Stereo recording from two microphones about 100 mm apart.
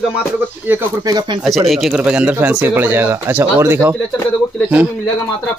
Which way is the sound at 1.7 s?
5° right (ahead or behind).